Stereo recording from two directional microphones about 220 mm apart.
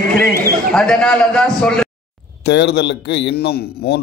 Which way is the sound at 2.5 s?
50° left (ahead or behind).